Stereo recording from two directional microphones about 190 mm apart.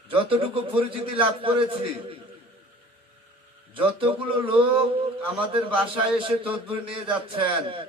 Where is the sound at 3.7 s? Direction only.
30° right (ahead or behind).